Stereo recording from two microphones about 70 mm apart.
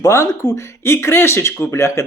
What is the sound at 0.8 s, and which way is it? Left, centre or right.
Speech, left.